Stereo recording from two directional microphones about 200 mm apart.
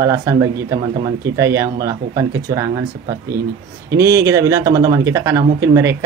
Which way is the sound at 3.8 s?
15° right (ahead or behind).